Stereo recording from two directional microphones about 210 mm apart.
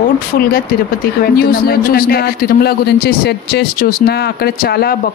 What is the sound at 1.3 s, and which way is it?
A man's voice, 45° left (ahead or behind).